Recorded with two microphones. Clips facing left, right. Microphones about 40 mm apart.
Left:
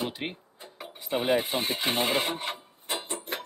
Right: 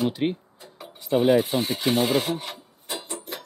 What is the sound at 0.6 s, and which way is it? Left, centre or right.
Rub, centre.